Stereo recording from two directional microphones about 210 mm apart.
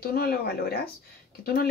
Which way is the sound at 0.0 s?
45° left (ahead or behind).